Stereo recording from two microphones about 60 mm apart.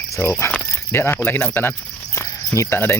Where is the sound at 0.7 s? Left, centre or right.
Left.